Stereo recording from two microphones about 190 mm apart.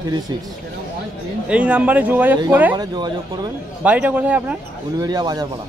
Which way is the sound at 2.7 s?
20° right (ahead or behind).